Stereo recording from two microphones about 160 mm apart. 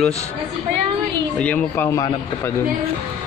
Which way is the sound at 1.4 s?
10° left (ahead or behind).